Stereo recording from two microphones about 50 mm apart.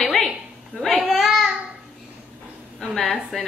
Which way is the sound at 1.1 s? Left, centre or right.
Centre.